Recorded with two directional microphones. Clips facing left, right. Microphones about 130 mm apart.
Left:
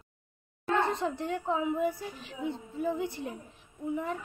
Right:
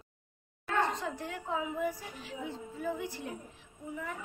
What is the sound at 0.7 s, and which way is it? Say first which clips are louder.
A woman's voice: left 3 dB; 30° left (ahead or behind).